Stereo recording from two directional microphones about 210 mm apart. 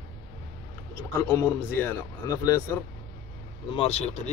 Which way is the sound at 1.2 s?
10° left (ahead or behind).